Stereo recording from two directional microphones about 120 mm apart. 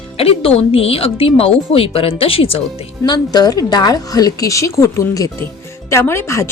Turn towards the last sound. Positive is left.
turn(degrees=20)  # may be behind; listen again after turning